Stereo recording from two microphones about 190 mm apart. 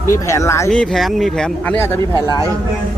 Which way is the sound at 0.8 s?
Centre (ahead or behind).